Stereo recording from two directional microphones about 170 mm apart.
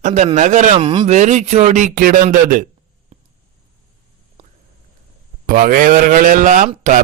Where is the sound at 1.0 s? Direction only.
45° right (ahead or behind).